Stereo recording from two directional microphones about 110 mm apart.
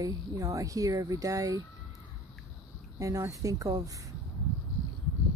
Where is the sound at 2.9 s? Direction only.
30° right (ahead or behind).